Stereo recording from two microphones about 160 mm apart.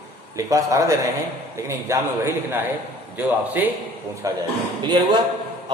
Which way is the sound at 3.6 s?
10° right (ahead or behind).